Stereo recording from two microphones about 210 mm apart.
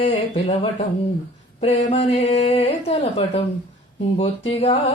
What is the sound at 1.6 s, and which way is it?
Mantra, 30° left (ahead or behind).